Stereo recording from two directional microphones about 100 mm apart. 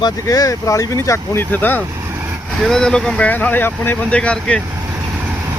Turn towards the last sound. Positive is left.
turn(degrees=10)  # may be behind; listen again after turning